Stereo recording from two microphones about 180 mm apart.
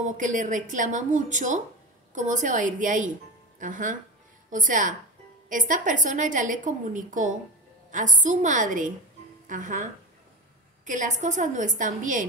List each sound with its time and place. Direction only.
0.0 s a woman's voice: 45° right (ahead or behind)
10.9 s a woman's voice: 45° right (ahead or behind)